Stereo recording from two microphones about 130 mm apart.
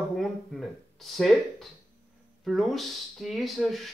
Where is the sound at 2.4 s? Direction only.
Centre (ahead or behind).